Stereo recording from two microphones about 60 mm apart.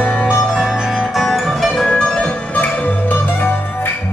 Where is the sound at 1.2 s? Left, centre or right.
Centre.